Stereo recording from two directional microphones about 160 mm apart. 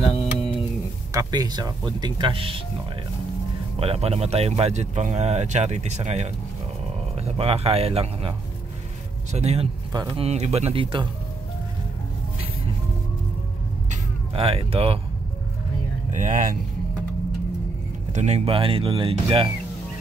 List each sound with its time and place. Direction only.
1.1 s speech: 25° right (ahead or behind)
3.8 s speech: 40° right (ahead or behind)
7.3 s speech: 35° right (ahead or behind)
13.8 s cat: 35° right (ahead or behind)
16.2 s speech: 50° right (ahead or behind)
18.1 s speech: 45° right (ahead or behind)